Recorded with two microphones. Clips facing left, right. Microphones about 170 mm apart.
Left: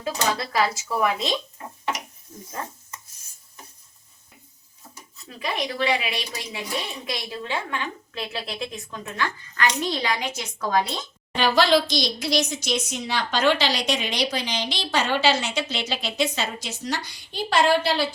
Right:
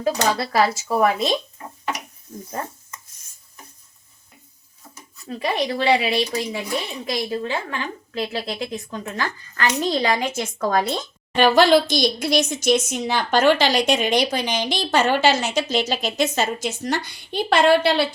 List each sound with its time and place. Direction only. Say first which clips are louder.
0.0 s speech: right 5 dB; 45° right (ahead or behind)
5.3 s speech: right 6 dB; 35° right (ahead or behind); by 18.1 s 65° right (ahead or behind)